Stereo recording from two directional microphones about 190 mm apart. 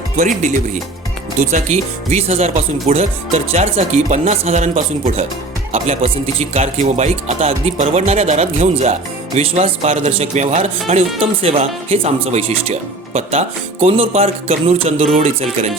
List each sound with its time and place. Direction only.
0.2 s speech: 40° right (ahead or behind)